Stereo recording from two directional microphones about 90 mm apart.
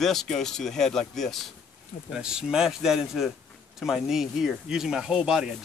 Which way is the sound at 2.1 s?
5° right (ahead or behind).